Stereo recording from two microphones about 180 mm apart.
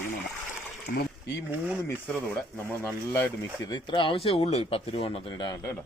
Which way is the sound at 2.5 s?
15° left (ahead or behind).